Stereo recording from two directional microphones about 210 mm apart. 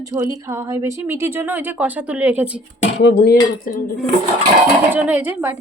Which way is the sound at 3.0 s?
55° left (ahead or behind).